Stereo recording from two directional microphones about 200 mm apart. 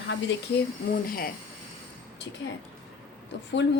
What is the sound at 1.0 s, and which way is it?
Speech, 45° left (ahead or behind).